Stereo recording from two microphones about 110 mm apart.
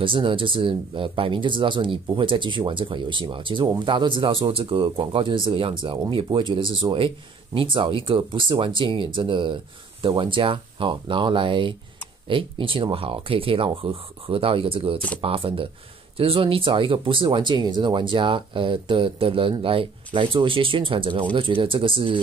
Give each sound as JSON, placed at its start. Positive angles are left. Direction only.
{"t": 0.0, "sound": "speech", "side_deg": -50}